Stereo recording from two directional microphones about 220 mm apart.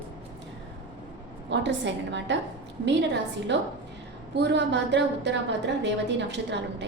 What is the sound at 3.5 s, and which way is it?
A woman's voice, 55° right (ahead or behind).